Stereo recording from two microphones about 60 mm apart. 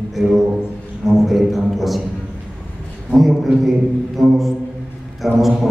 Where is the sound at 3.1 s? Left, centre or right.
Centre.